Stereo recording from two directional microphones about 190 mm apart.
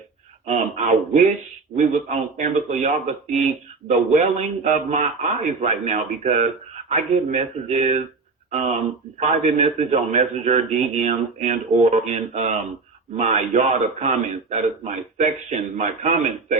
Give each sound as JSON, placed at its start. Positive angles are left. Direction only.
{"t": 0.4, "sound": "a man's voice", "side_deg": -35}